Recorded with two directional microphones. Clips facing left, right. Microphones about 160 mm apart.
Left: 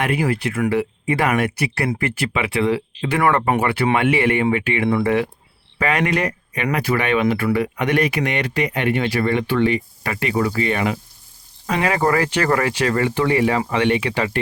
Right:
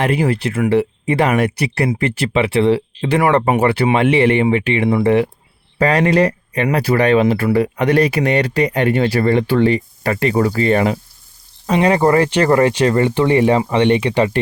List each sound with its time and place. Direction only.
0.0 s speech: 25° right (ahead or behind)
11.6 s speech: 25° right (ahead or behind)